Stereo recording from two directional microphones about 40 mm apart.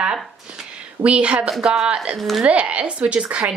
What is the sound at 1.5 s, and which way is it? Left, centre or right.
Speech, centre.